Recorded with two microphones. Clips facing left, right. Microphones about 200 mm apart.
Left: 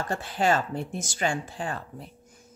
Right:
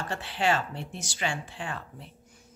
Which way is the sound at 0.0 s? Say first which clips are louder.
Left 3 dB; 45° left (ahead or behind).